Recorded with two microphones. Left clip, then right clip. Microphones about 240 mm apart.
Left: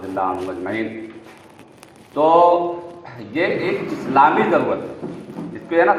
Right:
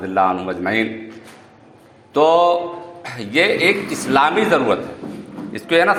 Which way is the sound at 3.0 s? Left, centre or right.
Right.